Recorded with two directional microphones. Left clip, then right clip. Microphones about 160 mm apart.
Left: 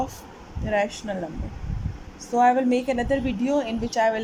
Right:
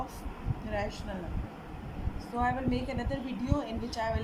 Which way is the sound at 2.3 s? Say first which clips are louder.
Left 12 dB; 55° left (ahead or behind).